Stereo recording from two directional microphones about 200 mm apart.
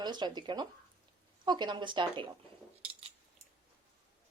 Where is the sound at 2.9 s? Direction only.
30° right (ahead or behind).